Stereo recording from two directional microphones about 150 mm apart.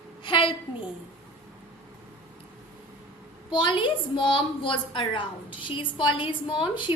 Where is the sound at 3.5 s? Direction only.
35° left (ahead or behind).